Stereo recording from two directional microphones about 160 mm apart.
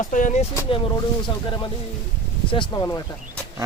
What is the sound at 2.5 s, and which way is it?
Speech, 30° left (ahead or behind).